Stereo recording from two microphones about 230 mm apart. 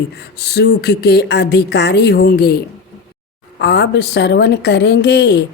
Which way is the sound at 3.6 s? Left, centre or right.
Left.